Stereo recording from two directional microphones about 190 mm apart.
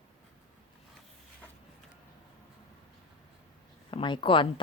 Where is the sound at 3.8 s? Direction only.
25° left (ahead or behind).